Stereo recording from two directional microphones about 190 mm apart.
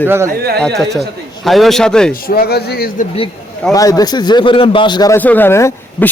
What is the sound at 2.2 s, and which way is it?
Speech, 55° left (ahead or behind).